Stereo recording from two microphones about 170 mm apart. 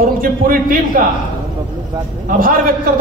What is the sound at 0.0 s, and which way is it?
A man's voice, 55° right (ahead or behind).